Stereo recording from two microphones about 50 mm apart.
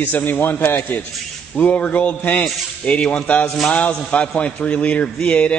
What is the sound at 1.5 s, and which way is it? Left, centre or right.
A man's voice, left.